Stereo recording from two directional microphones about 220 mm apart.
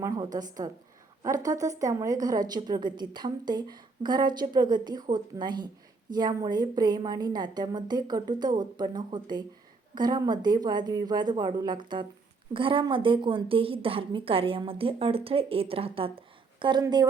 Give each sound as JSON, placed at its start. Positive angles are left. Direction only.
{"t": 0.0, "sound": "a woman's voice", "side_deg": -15}